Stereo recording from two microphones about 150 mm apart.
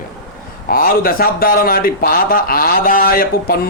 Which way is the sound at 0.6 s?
80° left.